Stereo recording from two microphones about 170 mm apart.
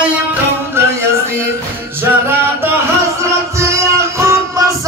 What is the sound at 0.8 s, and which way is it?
Music, 15° right (ahead or behind).